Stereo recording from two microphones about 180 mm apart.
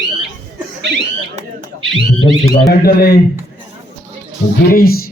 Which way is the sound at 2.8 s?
60° left (ahead or behind).